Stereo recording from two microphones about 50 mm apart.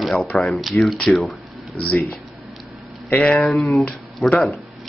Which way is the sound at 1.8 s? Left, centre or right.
Left.